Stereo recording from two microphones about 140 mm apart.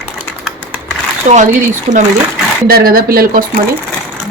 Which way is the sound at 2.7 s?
90° right.